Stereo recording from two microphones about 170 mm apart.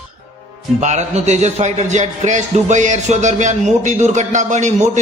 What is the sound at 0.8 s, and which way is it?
Speech, 45° right (ahead or behind).